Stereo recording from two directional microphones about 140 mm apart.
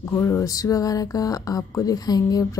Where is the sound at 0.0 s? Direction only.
20° left (ahead or behind).